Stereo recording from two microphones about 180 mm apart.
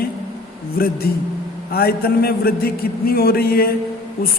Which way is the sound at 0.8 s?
55° left (ahead or behind).